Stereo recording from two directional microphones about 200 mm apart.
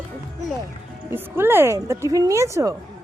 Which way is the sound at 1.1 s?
10° right (ahead or behind).